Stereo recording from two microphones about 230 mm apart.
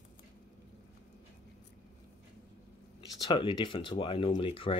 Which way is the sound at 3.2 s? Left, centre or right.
Left.